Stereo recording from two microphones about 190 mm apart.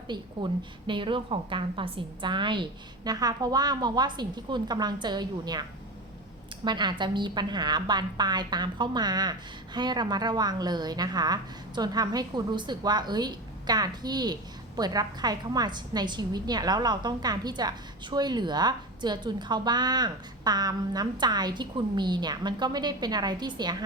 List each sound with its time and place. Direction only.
0.1 s a woman's voice: 25° right (ahead or behind)
6.7 s a woman's voice: 25° right (ahead or behind)